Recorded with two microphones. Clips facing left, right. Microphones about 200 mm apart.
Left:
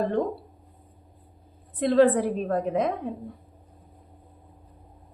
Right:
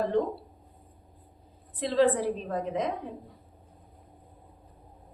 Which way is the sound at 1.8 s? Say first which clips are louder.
Left 5 dB; 55° left (ahead or behind).